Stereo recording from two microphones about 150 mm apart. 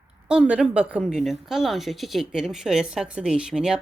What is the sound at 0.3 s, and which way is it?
Speech, 5° right (ahead or behind).